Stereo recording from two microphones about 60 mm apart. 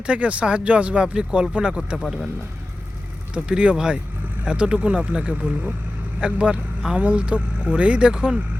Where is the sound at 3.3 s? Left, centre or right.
Centre.